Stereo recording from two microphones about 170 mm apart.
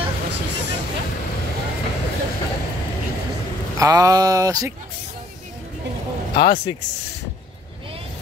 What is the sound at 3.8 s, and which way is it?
Speech, 20° right (ahead or behind).